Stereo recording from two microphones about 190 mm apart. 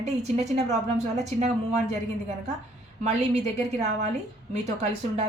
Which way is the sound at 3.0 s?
35° right (ahead or behind).